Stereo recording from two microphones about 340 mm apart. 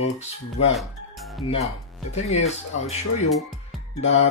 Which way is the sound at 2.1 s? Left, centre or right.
Centre.